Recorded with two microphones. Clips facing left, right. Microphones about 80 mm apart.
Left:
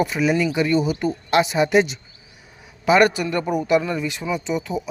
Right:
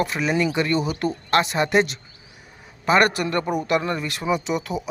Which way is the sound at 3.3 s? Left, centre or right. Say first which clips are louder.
Left 3 dB; centre.